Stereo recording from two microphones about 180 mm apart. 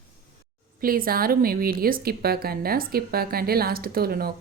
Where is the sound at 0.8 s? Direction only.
55° right (ahead or behind).